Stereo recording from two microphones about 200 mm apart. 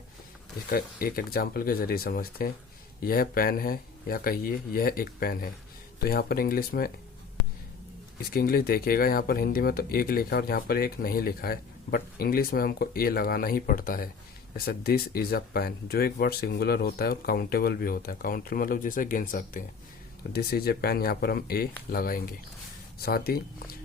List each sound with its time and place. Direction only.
0.7 s speech: 45° left (ahead or behind)
8.3 s speech: 50° left (ahead or behind)